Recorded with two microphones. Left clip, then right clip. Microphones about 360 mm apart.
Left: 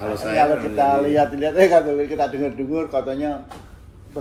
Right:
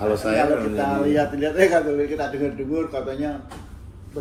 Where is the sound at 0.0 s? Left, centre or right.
Centre.